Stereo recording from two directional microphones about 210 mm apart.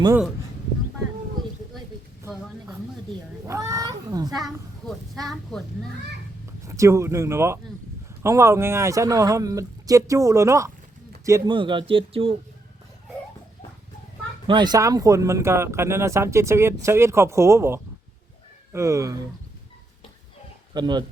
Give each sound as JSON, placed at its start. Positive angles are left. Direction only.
{"t": 2.6, "sound": "cat", "side_deg": -15}
{"t": 4.3, "sound": "a woman's voice", "side_deg": 0}
{"t": 6.7, "sound": "speech", "side_deg": -15}
{"t": 14.4, "sound": "speech", "side_deg": -20}
{"t": 20.7, "sound": "speech", "side_deg": -20}